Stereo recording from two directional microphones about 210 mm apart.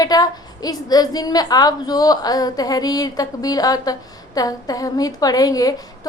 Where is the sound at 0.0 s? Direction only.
20° left (ahead or behind).